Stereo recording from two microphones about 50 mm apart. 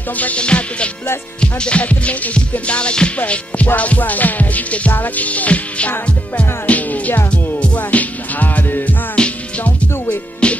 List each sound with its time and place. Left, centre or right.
0.2 s music: left
3.2 s music: left
9.2 s music: centre